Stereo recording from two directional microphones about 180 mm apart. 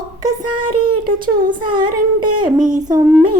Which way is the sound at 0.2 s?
20° right (ahead or behind).